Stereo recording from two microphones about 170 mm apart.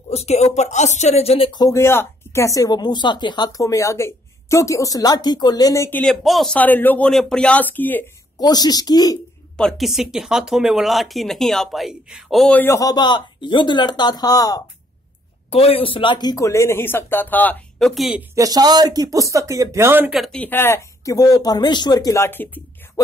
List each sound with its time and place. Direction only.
0.1 s speech: 40° left (ahead or behind); by 8.0 s 10° left (ahead or behind)
8.4 s speech: 25° left (ahead or behind)
9.6 s speech: centre (ahead or behind); by 14.6 s 20° left (ahead or behind)
15.5 s speech: 35° left (ahead or behind); by 18.2 s centre (ahead or behind)
18.3 s speech: 20° right (ahead or behind)
20.2 s speech: 5° left (ahead or behind)